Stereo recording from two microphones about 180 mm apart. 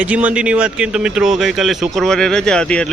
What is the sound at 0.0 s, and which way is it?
A man's voice, 5° right (ahead or behind).